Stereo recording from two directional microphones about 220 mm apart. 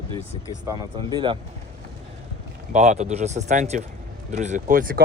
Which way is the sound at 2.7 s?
30° right (ahead or behind).